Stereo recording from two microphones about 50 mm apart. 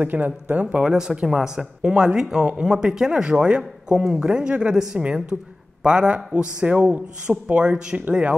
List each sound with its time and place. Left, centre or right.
0.0 s speech: right
0.7 s speech: centre